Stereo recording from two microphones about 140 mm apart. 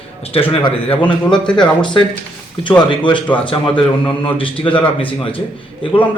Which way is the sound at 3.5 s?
35° left (ahead or behind).